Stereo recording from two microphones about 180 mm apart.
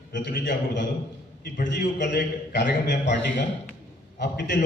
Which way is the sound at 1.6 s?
65° left (ahead or behind).